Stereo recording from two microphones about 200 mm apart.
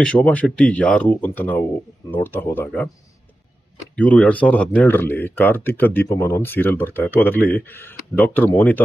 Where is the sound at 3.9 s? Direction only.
5° left (ahead or behind).